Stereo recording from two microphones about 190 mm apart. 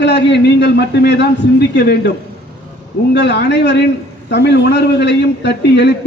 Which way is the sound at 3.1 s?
65° left (ahead or behind).